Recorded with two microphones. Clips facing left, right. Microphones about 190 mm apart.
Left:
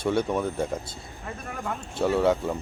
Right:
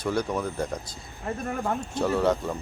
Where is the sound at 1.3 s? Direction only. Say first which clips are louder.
Right 5 dB; 40° right (ahead or behind).